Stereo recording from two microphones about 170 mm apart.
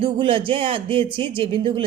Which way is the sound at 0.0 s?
30° right (ahead or behind).